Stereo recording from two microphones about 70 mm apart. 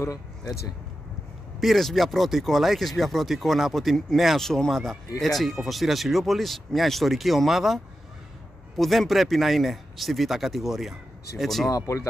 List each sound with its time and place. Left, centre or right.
0.0 s speech: left
1.6 s speech: centre
11.7 s speech: left